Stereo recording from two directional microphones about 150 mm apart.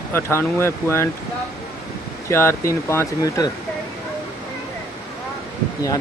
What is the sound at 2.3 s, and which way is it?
Speech, 20° left (ahead or behind).